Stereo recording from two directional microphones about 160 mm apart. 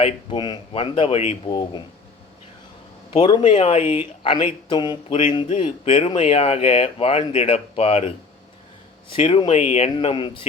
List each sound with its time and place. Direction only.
0.0 s speech: 30° left (ahead or behind)
1.5 s speech: 30° left (ahead or behind)
3.1 s speech: 30° left (ahead or behind)
3.5 s speech: 40° left (ahead or behind)